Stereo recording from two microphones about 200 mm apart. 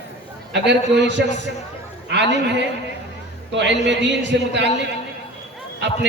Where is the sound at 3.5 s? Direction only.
60° right (ahead or behind).